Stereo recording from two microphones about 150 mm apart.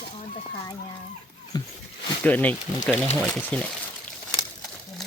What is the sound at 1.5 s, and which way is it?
Dog, 25° left (ahead or behind).